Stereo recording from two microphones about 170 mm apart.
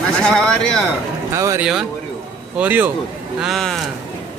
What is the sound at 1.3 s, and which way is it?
Speech, 20° right (ahead or behind).